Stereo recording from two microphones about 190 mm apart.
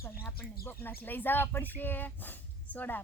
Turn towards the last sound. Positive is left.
turn(degrees=10)  # may be behind; listen again after turning